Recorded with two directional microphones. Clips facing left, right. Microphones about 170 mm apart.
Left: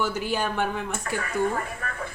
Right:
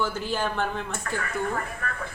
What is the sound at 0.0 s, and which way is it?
Speech, 10° left (ahead or behind).